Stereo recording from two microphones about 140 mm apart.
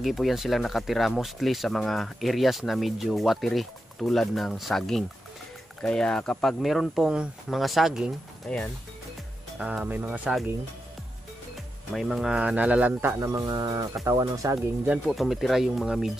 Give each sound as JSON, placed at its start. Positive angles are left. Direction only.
{"t": 0.0, "sound": "speech", "side_deg": 0}
{"t": 9.6, "sound": "speech", "side_deg": -10}
{"t": 11.9, "sound": "speech", "side_deg": 0}
{"t": 15.0, "sound": "speech", "side_deg": 0}